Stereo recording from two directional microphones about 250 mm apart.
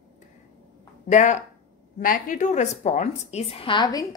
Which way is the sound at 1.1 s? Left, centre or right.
Left.